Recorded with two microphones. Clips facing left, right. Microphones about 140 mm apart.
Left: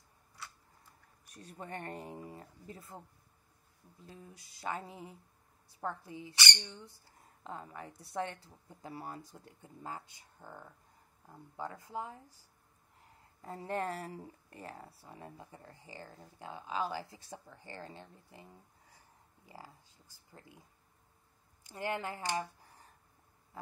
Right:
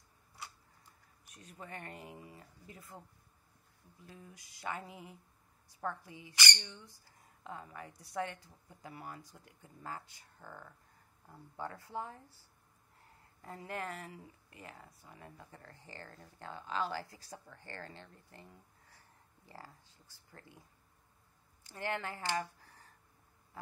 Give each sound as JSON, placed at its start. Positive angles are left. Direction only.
{"t": 1.4, "sound": "speech", "side_deg": 35}
{"t": 4.0, "sound": "speech", "side_deg": 30}
{"t": 13.4, "sound": "speech", "side_deg": 25}
{"t": 21.6, "sound": "speech", "side_deg": 15}